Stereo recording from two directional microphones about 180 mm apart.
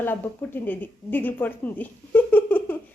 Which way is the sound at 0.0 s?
10° left (ahead or behind).